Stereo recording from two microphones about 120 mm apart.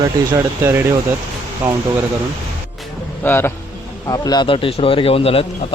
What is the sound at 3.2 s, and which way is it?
Speech, 20° left (ahead or behind).